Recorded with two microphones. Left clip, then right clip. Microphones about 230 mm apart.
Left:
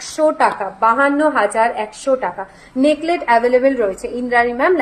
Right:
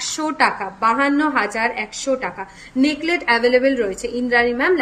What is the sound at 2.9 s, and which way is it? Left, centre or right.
Speech, right.